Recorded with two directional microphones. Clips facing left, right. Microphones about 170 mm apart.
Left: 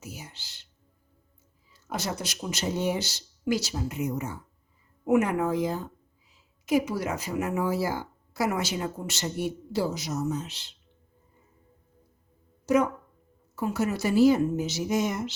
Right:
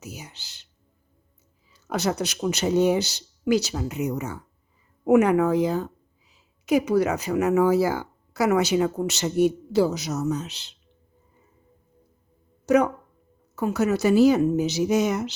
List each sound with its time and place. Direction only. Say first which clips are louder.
0.0 s music: right 3 dB; 75° right (ahead or behind)
1.9 s speech: right 7 dB; 65° right (ahead or behind)
12.6 s speech: right 4 dB; 70° right (ahead or behind)